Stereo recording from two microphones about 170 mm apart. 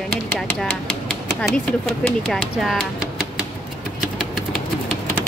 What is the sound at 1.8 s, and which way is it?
Speech, centre (ahead or behind).